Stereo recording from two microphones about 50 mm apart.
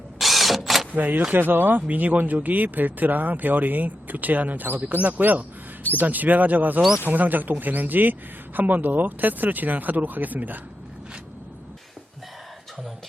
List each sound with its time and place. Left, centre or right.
0.2 s drill: centre
0.9 s speech: right